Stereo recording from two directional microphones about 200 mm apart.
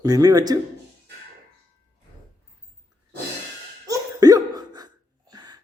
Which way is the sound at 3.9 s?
20° right (ahead or behind).